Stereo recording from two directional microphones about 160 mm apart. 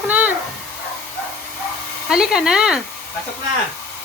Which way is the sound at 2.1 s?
5° right (ahead or behind).